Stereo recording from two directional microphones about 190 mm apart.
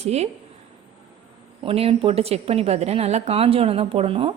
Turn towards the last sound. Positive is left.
turn(degrees=-30)  # may be behind; listen again after turning